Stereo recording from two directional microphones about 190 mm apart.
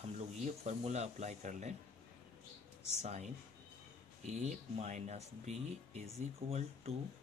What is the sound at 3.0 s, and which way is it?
Speech, 35° right (ahead or behind).